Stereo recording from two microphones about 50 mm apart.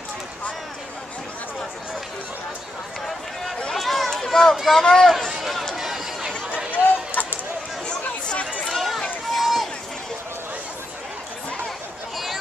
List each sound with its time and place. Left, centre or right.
3.7 s run: centre
4.6 s speech: centre
4.8 s speech: centre
5.4 s run: centre
7.2 s a sound: left
8.7 s run: centre